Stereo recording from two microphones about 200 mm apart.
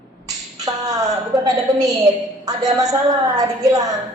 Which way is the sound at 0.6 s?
15° right (ahead or behind).